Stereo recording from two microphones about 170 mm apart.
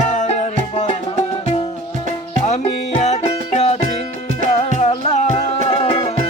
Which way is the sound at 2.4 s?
40° left (ahead or behind).